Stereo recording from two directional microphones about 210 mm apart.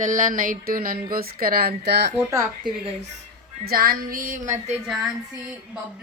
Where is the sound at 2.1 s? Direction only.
20° right (ahead or behind).